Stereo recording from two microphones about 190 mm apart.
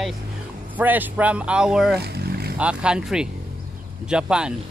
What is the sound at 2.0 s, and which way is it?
Wild animals, 60° right (ahead or behind).